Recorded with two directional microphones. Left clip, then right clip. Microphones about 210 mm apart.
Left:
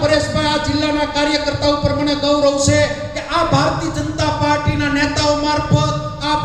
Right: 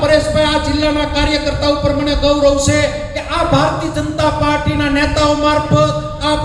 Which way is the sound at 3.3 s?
50° right (ahead or behind).